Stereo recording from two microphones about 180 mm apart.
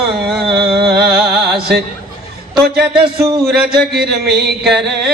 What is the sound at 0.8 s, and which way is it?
Music, 65° right (ahead or behind).